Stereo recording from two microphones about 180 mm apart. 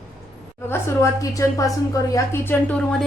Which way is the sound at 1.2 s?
20° left (ahead or behind).